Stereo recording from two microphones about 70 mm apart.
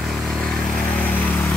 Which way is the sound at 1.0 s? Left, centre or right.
Left.